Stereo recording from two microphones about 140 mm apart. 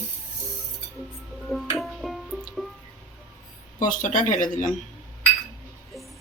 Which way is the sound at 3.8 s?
65° left (ahead or behind).